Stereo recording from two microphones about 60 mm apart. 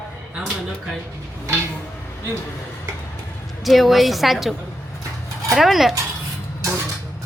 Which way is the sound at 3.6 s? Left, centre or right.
Centre.